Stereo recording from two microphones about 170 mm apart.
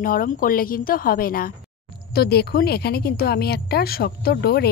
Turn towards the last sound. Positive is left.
turn(degrees=70)  # may be behind; listen again after turning